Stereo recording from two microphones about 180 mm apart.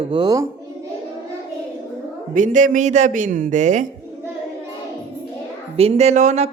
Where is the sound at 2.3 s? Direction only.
45° right (ahead or behind).